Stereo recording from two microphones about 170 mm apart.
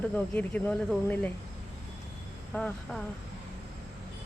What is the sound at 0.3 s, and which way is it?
Speech, 5° left (ahead or behind).